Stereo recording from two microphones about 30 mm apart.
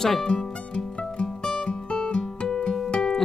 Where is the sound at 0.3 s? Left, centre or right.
Left.